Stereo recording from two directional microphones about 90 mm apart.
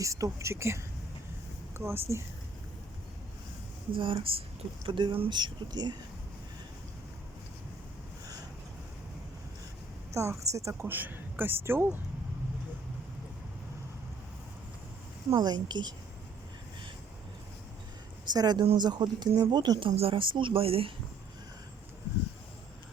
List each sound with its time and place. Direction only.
0.0 s speech: 35° right (ahead or behind)
3.9 s speech: 75° right (ahead or behind)
5.3 s speech: 55° right (ahead or behind)
10.2 s speech: 35° right (ahead or behind)
15.3 s speech: 50° right (ahead or behind)
18.3 s speech: 50° right (ahead or behind)
19.8 s speech: 80° right